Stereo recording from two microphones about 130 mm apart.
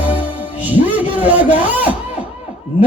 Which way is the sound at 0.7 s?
15° right (ahead or behind).